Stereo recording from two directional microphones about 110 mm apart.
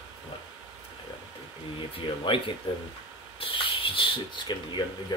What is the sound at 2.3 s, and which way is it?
Speech, 50° left (ahead or behind).